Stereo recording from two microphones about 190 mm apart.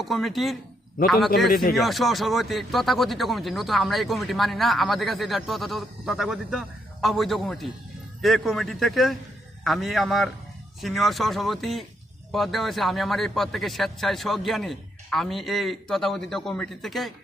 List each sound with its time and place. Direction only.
0.0 s speech: centre (ahead or behind)
1.5 s speech: 50° left (ahead or behind)
1.7 s speech: centre (ahead or behind)